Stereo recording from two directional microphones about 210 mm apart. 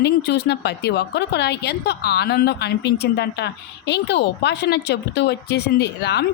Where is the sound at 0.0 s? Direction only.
55° left (ahead or behind).